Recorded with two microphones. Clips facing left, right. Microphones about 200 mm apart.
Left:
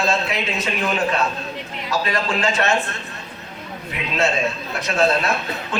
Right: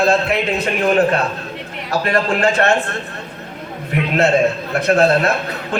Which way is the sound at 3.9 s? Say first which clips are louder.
Right 10 dB; 55° right (ahead or behind).